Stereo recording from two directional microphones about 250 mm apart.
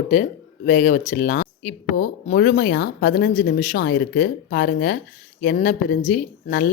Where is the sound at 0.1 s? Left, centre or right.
Left.